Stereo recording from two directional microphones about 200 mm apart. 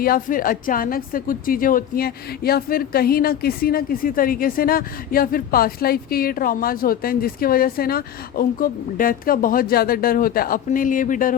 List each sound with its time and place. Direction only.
0.0 s a woman's voice: 45° left (ahead or behind)